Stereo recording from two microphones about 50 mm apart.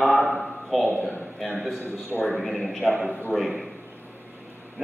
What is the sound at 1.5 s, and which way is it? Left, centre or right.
A man's voice, centre.